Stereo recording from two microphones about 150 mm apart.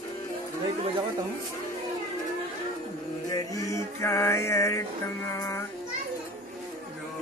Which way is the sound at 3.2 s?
25° left (ahead or behind).